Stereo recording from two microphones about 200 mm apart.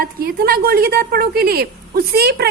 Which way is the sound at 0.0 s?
50° right (ahead or behind).